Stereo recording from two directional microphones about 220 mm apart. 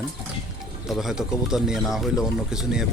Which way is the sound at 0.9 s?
Centre (ahead or behind).